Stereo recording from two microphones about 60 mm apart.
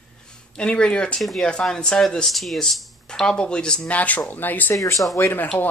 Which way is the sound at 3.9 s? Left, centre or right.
Left.